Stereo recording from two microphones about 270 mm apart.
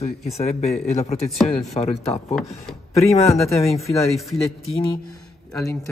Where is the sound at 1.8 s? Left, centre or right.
Left.